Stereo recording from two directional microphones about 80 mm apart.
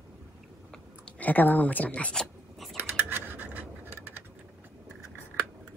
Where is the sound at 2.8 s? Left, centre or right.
Right.